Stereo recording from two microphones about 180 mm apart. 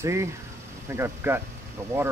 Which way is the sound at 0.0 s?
15° right (ahead or behind).